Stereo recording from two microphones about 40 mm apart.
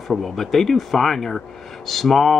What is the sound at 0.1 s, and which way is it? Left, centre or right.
Speech, centre.